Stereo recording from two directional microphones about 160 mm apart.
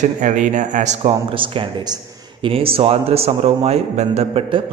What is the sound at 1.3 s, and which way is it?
A man's voice, 35° right (ahead or behind).